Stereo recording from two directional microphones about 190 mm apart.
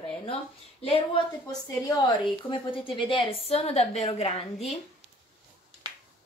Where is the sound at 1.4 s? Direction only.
20° left (ahead or behind).